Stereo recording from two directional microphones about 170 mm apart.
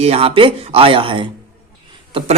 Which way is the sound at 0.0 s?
35° right (ahead or behind).